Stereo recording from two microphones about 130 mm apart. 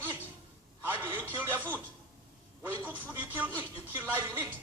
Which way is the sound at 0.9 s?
15° right (ahead or behind).